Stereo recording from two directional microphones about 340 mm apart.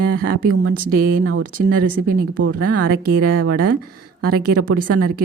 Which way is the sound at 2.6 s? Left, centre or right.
Right.